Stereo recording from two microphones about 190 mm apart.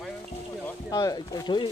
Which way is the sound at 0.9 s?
20° left (ahead or behind).